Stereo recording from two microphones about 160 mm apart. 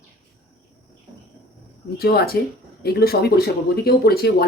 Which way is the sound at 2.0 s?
80° left.